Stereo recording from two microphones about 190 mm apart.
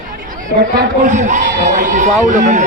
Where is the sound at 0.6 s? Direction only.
45° right (ahead or behind).